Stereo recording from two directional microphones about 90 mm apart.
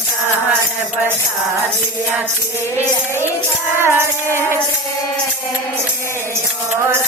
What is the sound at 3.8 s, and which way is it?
Music, 30° right (ahead or behind).